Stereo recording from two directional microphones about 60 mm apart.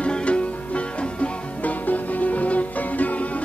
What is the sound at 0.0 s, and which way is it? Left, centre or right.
Music, centre.